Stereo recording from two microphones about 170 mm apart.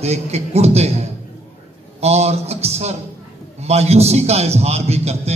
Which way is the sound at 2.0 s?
40° right (ahead or behind).